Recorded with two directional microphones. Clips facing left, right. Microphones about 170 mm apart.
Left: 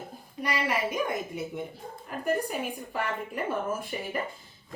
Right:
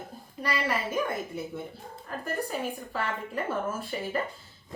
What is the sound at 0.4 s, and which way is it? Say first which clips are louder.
Speech: left 1 dB; 15° left (ahead or behind).